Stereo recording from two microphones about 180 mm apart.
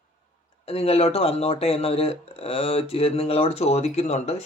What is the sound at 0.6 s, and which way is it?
Speech, 35° left (ahead or behind).